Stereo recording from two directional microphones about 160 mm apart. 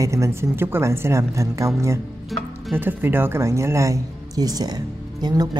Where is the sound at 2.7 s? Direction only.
15° right (ahead or behind).